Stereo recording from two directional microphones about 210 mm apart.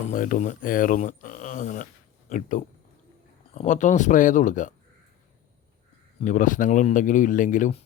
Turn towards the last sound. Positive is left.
turn(degrees=35)  # may be behind; listen again after turning